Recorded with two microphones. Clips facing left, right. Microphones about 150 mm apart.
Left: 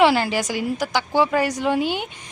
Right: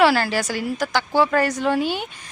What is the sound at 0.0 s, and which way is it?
Speech, 20° left (ahead or behind).